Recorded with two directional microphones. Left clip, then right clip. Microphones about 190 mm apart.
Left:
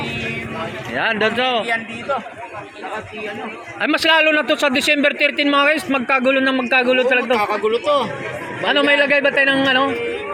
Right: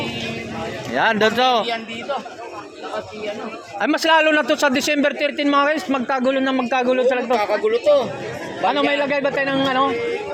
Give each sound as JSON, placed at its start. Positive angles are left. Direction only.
{"t": 0.9, "sound": "speech", "side_deg": -10}
{"t": 3.8, "sound": "a man's voice", "side_deg": -5}
{"t": 7.3, "sound": "speech", "side_deg": 45}
{"t": 8.6, "sound": "a man's voice", "side_deg": 5}